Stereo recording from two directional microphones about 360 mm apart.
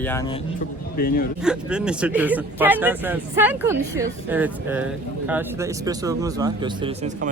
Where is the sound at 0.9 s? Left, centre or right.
Left.